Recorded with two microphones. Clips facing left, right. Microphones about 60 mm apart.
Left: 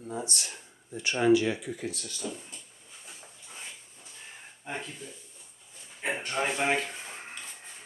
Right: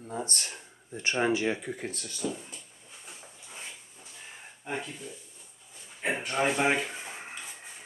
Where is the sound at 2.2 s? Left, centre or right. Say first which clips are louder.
Right 4 dB; centre.